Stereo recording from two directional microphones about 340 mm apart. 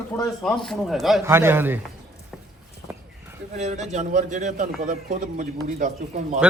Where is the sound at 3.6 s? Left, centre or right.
Right.